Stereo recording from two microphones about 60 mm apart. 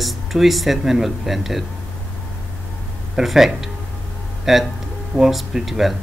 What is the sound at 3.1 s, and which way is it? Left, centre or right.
Speech, centre.